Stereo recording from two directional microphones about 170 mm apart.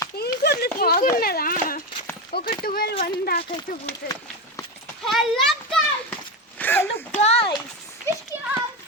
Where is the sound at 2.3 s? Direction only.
60° left (ahead or behind).